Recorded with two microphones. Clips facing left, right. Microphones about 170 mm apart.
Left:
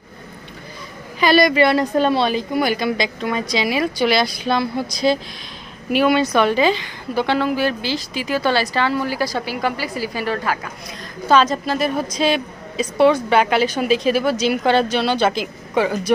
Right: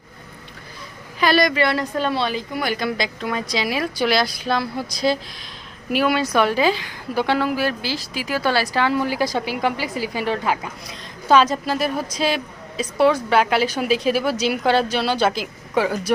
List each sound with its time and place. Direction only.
1.2 s a woman's voice: centre (ahead or behind)
1.5 s a woman's voice: 15° left (ahead or behind)
2.7 s a woman's voice: centre (ahead or behind)